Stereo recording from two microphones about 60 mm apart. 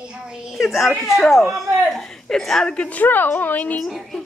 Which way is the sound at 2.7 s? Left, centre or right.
Left.